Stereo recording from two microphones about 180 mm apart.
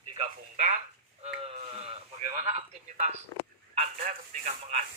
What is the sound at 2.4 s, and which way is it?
A man's voice, 40° right (ahead or behind).